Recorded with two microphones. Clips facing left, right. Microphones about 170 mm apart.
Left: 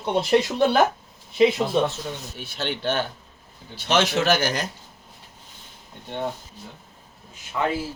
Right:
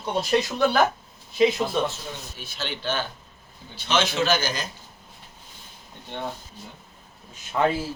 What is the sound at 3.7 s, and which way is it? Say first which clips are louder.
Speech: left 3 dB; 75° left (ahead or behind).